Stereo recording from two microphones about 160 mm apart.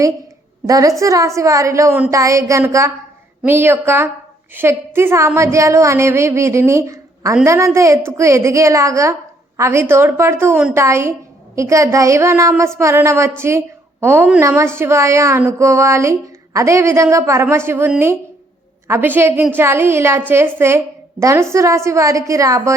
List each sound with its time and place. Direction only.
0.7 s a woman's voice: 20° right (ahead or behind)